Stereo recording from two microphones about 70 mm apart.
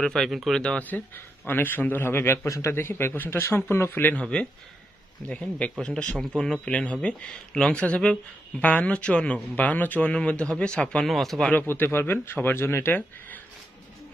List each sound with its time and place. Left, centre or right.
0.0 s speech: centre
0.6 s speech: centre
0.8 s a man's voice: left
2.4 s a man's voice: left
2.7 s speech: left; by 11.1 s centre
11.1 s speech: centre
11.5 s speech: left